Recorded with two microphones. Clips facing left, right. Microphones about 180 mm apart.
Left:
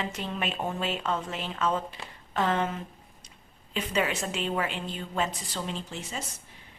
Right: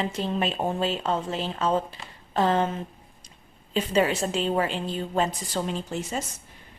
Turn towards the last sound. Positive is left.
turn(degrees=-45)  # may be behind; listen again after turning